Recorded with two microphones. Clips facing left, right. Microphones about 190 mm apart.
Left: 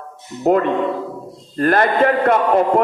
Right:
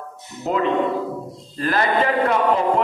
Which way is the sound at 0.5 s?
50° left (ahead or behind).